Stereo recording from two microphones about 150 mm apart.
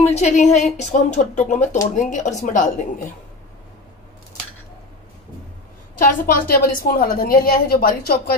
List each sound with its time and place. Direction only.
0.0 s a woman's voice: 45° left (ahead or behind)
5.9 s a woman's voice: 70° left (ahead or behind)